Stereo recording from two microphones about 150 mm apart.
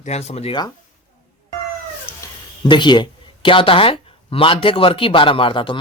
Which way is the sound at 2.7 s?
30° left (ahead or behind).